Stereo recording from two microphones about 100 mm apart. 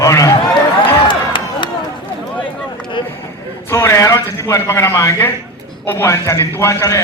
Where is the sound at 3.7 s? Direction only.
30° left (ahead or behind).